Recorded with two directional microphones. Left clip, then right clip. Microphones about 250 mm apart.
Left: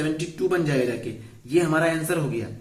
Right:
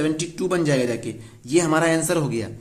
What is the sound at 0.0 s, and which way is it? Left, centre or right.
A man's voice, right.